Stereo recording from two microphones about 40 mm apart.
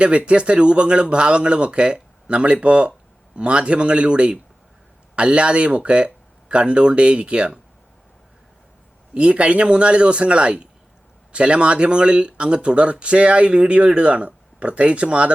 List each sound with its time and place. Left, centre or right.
0.0 s speech: right
9.1 s speech: right